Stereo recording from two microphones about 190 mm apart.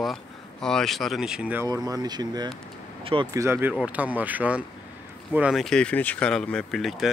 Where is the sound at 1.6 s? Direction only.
20° right (ahead or behind).